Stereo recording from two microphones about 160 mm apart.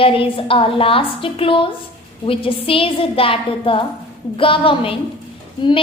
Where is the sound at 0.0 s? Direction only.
35° left (ahead or behind).